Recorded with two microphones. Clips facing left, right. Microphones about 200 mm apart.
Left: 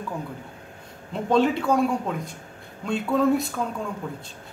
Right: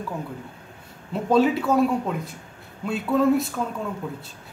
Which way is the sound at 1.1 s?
5° right (ahead or behind).